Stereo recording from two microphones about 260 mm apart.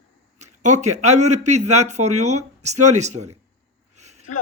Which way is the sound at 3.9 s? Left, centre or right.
Right.